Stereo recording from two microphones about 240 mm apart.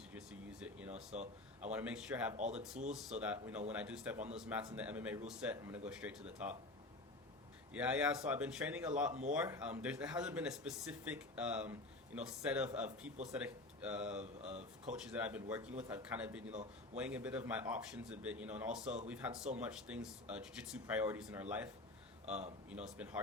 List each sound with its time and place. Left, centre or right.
0.1 s a sound: centre
1.1 s speech: right
1.7 s speech: centre
2.3 s speech: right
2.9 s speech: centre
7.7 s speech: centre